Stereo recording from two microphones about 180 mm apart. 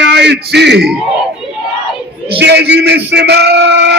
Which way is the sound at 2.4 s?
70° right (ahead or behind).